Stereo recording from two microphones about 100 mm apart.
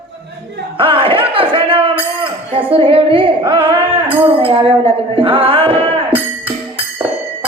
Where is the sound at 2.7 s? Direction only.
65° right (ahead or behind).